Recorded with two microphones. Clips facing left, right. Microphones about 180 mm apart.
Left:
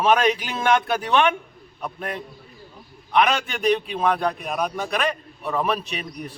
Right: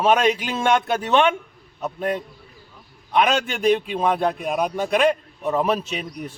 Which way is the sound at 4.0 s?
25° right (ahead or behind).